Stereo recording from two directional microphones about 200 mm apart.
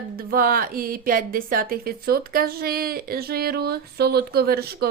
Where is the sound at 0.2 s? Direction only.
45° right (ahead or behind).